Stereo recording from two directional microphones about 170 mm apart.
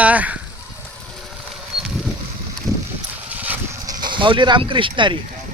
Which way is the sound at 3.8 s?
25° right (ahead or behind).